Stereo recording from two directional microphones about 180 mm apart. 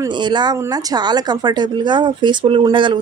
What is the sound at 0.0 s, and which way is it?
A woman's voice, 25° right (ahead or behind).